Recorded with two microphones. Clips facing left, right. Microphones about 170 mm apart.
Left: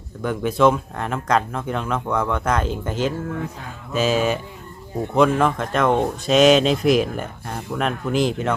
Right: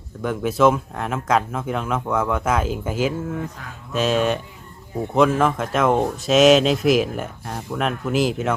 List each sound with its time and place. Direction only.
0.2 s speech: centre (ahead or behind)